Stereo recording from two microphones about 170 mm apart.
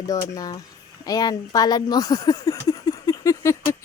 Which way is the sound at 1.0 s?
20° left (ahead or behind).